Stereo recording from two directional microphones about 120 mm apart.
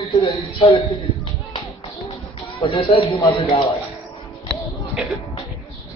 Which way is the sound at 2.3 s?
45° left (ahead or behind).